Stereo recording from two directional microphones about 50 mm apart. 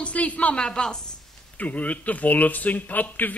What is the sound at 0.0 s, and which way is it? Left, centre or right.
Speech, left.